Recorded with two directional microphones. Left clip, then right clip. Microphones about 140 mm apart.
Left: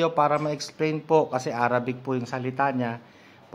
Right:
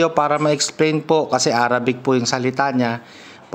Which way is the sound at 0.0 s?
30° right (ahead or behind).